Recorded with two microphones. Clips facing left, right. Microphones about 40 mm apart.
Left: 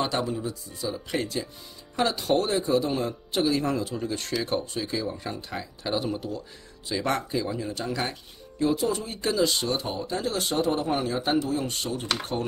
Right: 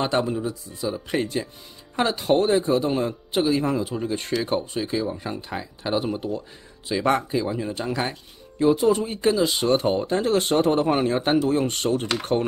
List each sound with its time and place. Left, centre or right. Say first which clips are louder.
0.0 s speech: right 4 dB; right
0.3 s speech: right 4 dB; centre
8.7 s speech: right 7 dB; right
9.3 s speech: right 2 dB; centre
9.8 s a man's voice: right 8 dB; right